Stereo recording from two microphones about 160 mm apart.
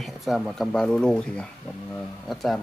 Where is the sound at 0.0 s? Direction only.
Centre (ahead or behind).